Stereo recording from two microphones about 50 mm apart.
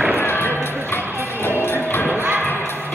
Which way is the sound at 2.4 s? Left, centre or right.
Left.